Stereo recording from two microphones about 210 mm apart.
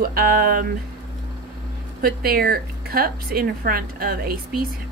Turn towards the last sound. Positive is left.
turn(degrees=-45)  # may be behind; listen again after turning